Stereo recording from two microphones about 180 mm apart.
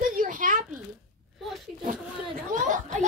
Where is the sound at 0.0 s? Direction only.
50° right (ahead or behind).